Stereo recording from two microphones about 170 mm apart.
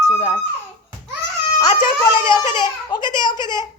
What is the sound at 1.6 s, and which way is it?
A child's voice, 25° left (ahead or behind).